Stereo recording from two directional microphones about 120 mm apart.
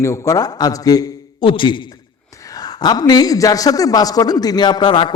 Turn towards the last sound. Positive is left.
turn(degrees=40)  # may be behind; listen again after turning